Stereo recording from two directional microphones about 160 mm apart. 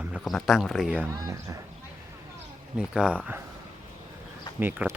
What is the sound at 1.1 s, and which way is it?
Speech, 20° right (ahead or behind).